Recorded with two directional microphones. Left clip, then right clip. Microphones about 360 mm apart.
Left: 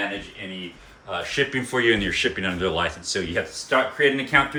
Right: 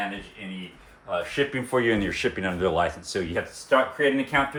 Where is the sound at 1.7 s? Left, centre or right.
Centre.